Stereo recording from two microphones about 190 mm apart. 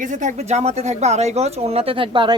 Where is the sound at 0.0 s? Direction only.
40° right (ahead or behind).